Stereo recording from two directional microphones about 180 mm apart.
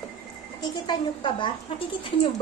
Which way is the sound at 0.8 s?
25° left (ahead or behind).